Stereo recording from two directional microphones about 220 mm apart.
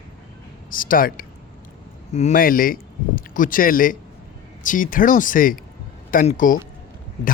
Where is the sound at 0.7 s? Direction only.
40° left (ahead or behind).